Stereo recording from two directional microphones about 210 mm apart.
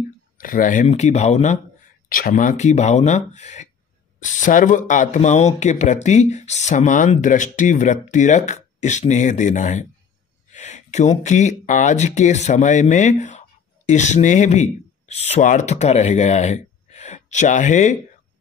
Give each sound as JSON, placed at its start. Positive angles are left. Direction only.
{"t": 0.4, "sound": "speech", "side_deg": 40}